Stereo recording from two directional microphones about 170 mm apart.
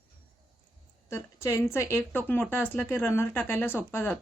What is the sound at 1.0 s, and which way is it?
Speech, 15° left (ahead or behind).